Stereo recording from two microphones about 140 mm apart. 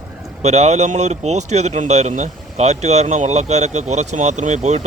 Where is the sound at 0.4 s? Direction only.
55° right (ahead or behind).